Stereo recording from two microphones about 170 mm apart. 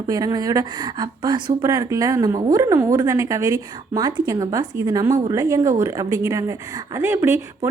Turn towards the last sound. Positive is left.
turn(degrees=-15)  # may be behind; listen again after turning